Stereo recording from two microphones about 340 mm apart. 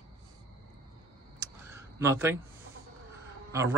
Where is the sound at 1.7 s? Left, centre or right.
Centre.